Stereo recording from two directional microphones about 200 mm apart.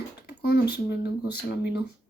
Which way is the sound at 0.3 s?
55° left (ahead or behind).